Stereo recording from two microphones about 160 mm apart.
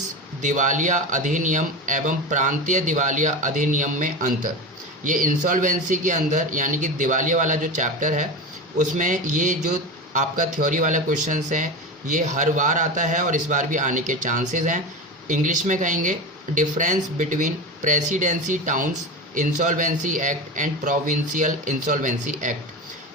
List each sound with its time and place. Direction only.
0.4 s speech: 50° right (ahead or behind)